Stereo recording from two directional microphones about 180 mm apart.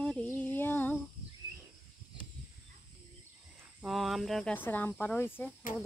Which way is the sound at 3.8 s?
Centre (ahead or behind).